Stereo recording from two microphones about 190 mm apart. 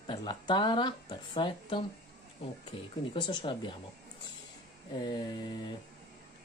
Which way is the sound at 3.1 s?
25° left (ahead or behind).